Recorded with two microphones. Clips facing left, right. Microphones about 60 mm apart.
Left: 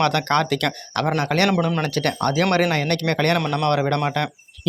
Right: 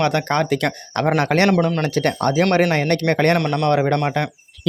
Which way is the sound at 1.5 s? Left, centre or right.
Centre.